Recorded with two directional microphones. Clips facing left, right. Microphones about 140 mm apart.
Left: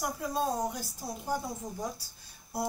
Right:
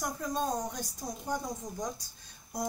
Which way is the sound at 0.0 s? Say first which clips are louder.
Left 1 dB; 10° left (ahead or behind).